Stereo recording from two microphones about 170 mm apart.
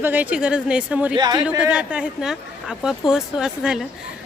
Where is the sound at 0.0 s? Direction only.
10° right (ahead or behind).